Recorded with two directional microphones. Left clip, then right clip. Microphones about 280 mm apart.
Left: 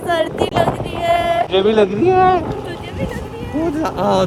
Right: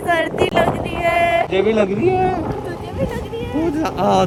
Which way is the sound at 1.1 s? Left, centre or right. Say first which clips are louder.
Left 2 dB; left.